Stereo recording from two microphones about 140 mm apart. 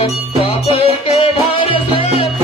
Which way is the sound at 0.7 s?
40° left (ahead or behind).